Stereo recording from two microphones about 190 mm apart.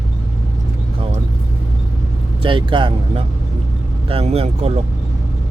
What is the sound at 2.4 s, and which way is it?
Speech, 25° right (ahead or behind).